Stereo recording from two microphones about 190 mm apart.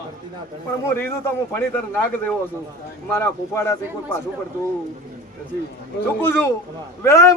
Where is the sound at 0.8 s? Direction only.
10° left (ahead or behind).